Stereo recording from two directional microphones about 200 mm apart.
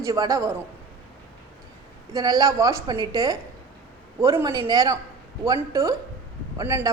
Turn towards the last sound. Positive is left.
turn(degrees=-15)  # may be behind; listen again after turning